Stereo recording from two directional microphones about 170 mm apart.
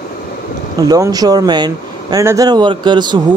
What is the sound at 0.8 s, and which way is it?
Speech, 20° right (ahead or behind).